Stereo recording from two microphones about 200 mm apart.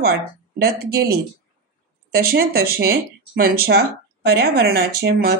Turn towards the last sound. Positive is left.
turn(degrees=-50)  # may be behind; listen again after turning